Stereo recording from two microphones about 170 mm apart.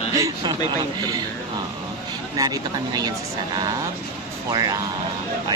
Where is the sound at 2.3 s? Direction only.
25° right (ahead or behind).